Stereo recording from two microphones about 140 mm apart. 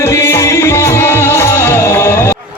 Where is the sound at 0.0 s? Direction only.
20° left (ahead or behind).